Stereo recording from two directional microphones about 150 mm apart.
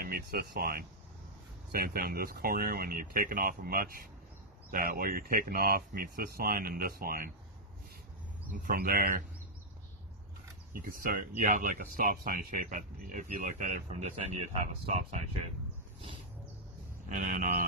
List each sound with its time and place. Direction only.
0.0 s speech: 90° right
8.5 s speech: 75° right (ahead or behind)
10.8 s speech: 65° right (ahead or behind); by 15.2 s 45° right (ahead or behind)
17.1 s speech: 55° right (ahead or behind)